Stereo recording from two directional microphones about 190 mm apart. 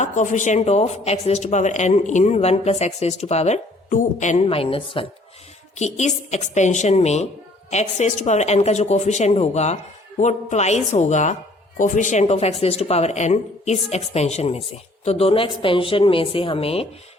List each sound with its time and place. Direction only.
0.0 s speech: 40° left (ahead or behind)